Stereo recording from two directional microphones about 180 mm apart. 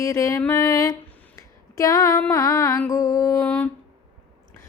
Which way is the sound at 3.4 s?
5° left (ahead or behind).